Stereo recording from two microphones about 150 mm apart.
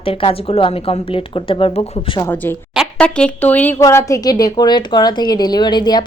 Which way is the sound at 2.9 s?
5° left (ahead or behind).